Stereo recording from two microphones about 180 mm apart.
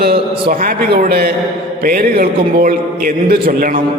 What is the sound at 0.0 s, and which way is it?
A man's voice, 60° right (ahead or behind).